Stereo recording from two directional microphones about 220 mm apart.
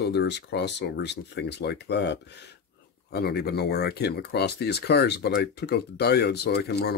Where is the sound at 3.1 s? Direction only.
45° left (ahead or behind).